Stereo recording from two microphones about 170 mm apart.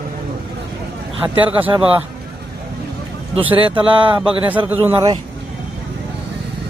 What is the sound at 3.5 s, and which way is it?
Speech, 30° right (ahead or behind).